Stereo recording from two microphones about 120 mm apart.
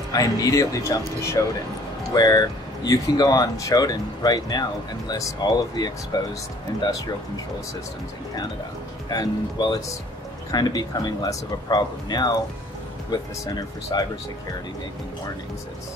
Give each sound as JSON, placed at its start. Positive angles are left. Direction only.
{"t": 0.1, "sound": "speech", "side_deg": 30}
{"t": 2.1, "sound": "speech", "side_deg": 35}
{"t": 9.1, "sound": "speech", "side_deg": 35}